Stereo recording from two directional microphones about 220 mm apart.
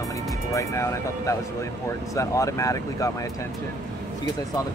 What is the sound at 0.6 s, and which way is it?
Speech, 15° left (ahead or behind).